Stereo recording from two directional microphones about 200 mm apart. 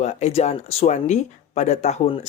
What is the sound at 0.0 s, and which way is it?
Speech, 35° left (ahead or behind).